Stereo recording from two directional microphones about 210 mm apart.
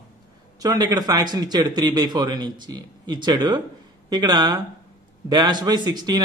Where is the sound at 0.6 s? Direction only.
15° right (ahead or behind).